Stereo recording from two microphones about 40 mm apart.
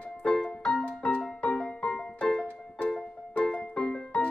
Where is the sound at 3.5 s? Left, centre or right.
Left.